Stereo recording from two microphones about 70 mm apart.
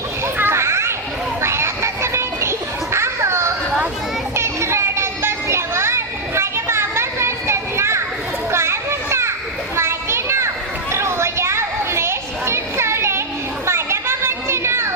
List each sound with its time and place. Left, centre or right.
0.3 s children playing: right
10.9 s a sound: right
13.7 s children playing: right